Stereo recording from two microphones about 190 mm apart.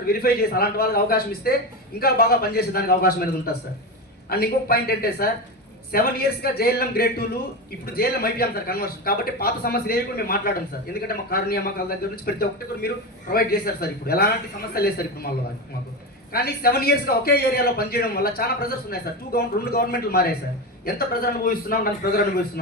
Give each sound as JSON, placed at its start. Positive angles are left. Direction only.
{"t": 0.0, "sound": "a man's voice", "side_deg": 50}
{"t": 16.3, "sound": "a man's voice", "side_deg": 55}